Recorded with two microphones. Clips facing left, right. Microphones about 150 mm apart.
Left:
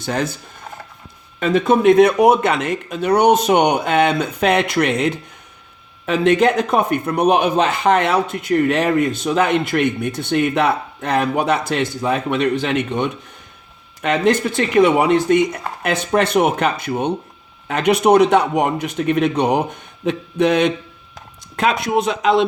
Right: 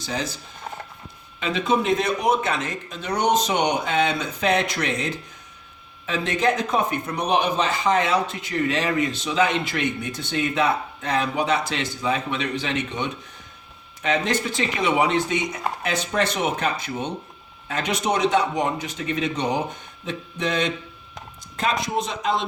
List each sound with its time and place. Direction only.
0.0 s a man's voice: 55° left (ahead or behind)
1.4 s a man's voice: 50° left (ahead or behind); by 22.4 s 70° left (ahead or behind)